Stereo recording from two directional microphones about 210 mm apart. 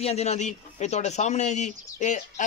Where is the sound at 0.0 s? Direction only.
30° left (ahead or behind).